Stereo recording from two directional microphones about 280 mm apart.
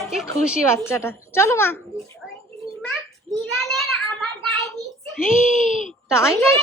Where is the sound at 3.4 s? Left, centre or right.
Centre.